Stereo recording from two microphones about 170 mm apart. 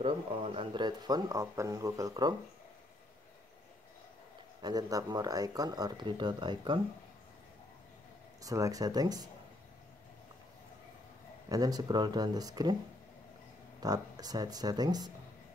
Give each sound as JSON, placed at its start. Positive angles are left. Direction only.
{"t": 0.0, "sound": "speech", "side_deg": -35}
{"t": 4.6, "sound": "speech", "side_deg": -25}
{"t": 8.4, "sound": "speech", "side_deg": -20}
{"t": 11.4, "sound": "speech", "side_deg": -20}
{"t": 13.7, "sound": "speech", "side_deg": -20}